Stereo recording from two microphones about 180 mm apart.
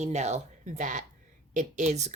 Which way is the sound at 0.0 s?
40° right (ahead or behind).